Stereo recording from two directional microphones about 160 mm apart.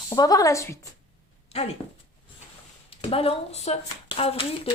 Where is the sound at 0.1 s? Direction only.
20° left (ahead or behind).